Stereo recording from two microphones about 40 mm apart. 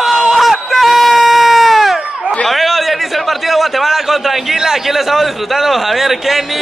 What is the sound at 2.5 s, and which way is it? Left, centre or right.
A man's voice, centre.